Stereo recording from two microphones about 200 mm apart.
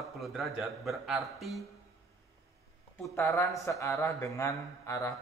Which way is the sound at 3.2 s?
15° left (ahead or behind).